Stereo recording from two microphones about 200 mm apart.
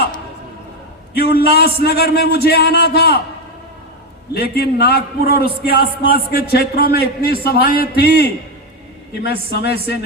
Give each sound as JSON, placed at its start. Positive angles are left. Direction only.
{"t": 1.3, "sound": "a man's voice", "side_deg": 50}
{"t": 4.4, "sound": "a man's voice", "side_deg": 50}